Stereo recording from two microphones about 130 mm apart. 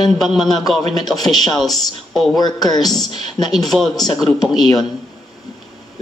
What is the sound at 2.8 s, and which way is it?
A man's voice, centre (ahead or behind).